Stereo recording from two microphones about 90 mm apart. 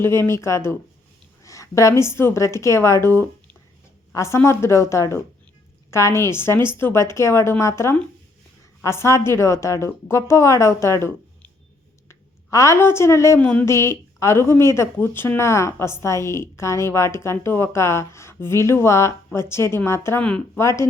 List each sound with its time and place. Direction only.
0.0 s a woman's voice: 30° left (ahead or behind)
13.4 s a sound: 15° left (ahead or behind)
13.7 s a woman's voice: 30° left (ahead or behind)